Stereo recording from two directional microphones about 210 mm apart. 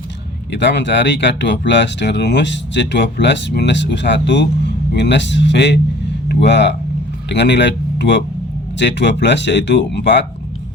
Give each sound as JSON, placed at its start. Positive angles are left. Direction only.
{"t": 0.5, "sound": "speech", "side_deg": 55}